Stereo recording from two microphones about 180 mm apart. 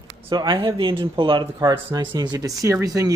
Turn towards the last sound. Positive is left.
turn(degrees=-20)  # may be behind; listen again after turning